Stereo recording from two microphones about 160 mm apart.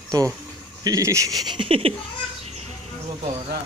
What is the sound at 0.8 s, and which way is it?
Speech, 20° right (ahead or behind).